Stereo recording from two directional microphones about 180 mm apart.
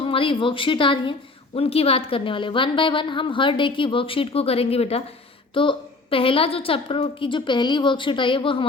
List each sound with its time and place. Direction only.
0.0 s a woman's voice: 30° left (ahead or behind)